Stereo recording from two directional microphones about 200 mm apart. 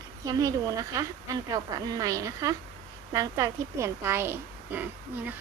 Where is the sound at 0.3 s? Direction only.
15° right (ahead or behind).